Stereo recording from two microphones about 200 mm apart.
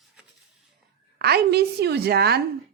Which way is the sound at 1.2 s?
55° right (ahead or behind).